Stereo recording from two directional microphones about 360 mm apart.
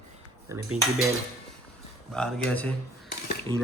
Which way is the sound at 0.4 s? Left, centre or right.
Centre.